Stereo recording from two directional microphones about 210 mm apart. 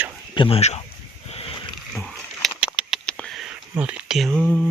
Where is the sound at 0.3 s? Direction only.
25° left (ahead or behind).